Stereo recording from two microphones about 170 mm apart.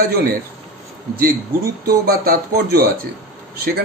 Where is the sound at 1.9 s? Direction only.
65° right (ahead or behind).